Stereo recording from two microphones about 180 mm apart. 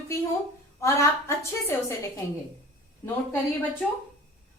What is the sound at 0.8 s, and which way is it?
Speech, 15° left (ahead or behind).